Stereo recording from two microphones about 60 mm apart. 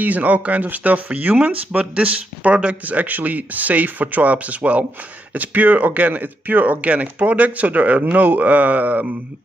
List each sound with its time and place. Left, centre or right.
0.0 s speech: right